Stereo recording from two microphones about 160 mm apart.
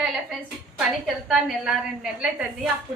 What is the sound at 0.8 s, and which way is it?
Speech, centre (ahead or behind).